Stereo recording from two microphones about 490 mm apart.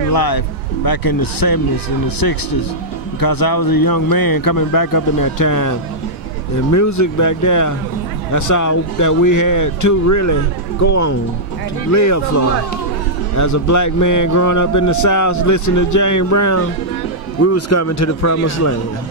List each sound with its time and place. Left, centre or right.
0.1 s a man's voice: left
13.4 s a man's voice: left